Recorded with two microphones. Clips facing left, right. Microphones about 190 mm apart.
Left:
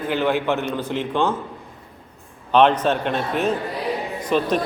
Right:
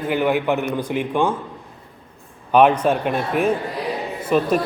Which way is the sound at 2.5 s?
10° right (ahead or behind).